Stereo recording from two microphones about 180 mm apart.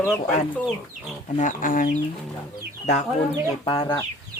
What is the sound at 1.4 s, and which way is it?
Speech, 45° left (ahead or behind).